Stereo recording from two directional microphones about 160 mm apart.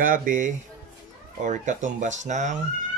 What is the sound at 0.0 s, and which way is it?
Speech, 60° right (ahead or behind).